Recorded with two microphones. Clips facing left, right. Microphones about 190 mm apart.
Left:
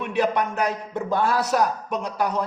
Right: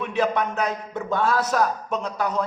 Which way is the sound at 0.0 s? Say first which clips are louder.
Even; 10° left (ahead or behind).